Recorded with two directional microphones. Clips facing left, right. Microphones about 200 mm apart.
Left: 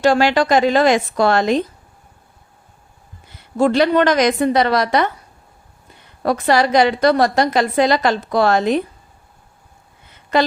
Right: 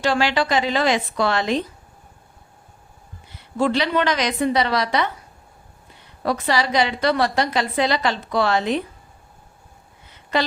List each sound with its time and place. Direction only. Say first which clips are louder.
0.0 s a woman's voice: left 6 dB; 45° left (ahead or behind)
3.6 s a woman's voice: left 6 dB; 45° left (ahead or behind)
6.2 s a woman's voice: left 6 dB; 50° left (ahead or behind)